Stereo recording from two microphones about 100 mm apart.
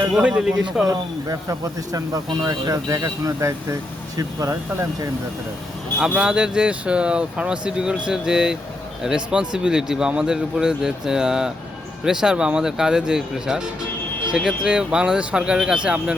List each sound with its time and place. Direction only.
0.1 s speech: 10° right (ahead or behind)
0.9 s speech: 35° right (ahead or behind)
6.0 s speech: 10° right (ahead or behind)